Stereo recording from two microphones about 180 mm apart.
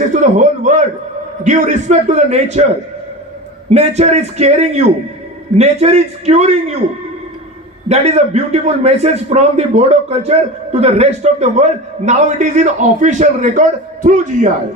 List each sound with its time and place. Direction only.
0.1 s a man's voice: 45° right (ahead or behind)
3.7 s a man's voice: 35° right (ahead or behind)
7.9 s a man's voice: 35° right (ahead or behind)